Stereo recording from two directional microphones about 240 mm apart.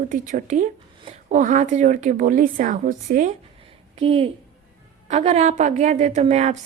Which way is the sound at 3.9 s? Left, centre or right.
Right.